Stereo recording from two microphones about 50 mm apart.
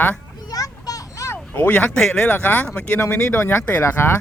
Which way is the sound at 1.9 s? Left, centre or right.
Centre.